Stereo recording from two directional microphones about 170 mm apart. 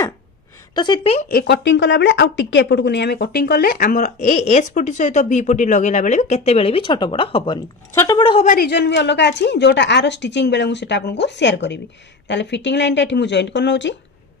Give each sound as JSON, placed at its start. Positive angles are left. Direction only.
{"t": 0.7, "sound": "a woman's voice", "side_deg": 25}
{"t": 1.3, "sound": "speech", "side_deg": 85}
{"t": 7.9, "sound": "speech", "side_deg": 15}
{"t": 8.2, "sound": "speech", "side_deg": 30}
{"t": 8.5, "sound": "speech", "side_deg": 65}